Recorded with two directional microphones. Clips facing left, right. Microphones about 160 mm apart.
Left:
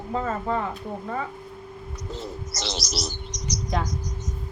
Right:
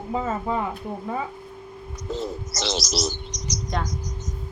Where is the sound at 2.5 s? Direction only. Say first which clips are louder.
Right 4 dB; 90° right.